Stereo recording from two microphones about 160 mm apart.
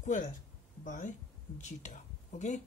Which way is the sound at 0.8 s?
50° left (ahead or behind).